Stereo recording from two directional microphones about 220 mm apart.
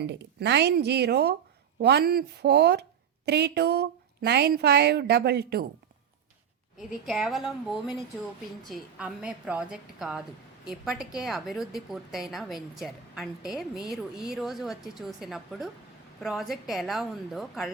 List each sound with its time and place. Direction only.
0.0 s speech: 50° right (ahead or behind)
6.7 s a woman's voice: centre (ahead or behind)